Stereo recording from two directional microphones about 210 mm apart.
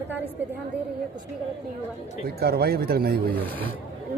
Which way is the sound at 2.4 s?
50° right (ahead or behind).